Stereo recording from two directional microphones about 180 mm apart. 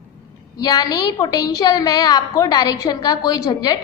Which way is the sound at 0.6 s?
20° left (ahead or behind).